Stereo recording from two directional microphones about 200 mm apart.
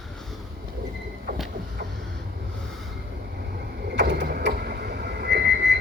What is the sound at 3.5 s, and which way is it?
Vehicle, 55° right (ahead or behind).